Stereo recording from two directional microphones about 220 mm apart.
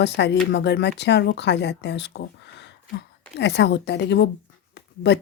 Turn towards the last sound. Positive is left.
turn(degrees=50)  # may be behind; listen again after turning